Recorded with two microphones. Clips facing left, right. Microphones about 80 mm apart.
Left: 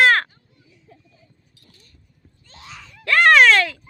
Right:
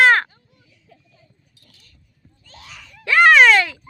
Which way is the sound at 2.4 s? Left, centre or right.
Left.